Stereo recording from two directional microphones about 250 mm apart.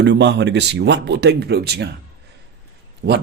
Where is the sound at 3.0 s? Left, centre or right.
Right.